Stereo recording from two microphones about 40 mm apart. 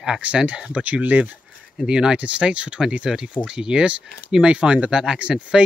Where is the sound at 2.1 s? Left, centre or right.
Right.